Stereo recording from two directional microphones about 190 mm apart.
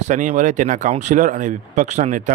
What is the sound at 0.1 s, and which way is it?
Speech, 40° right (ahead or behind).